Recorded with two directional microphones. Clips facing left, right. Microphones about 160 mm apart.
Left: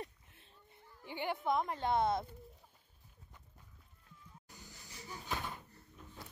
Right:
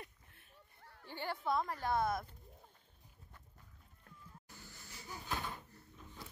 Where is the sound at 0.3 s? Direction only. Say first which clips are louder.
Left 2 dB; 20° left (ahead or behind).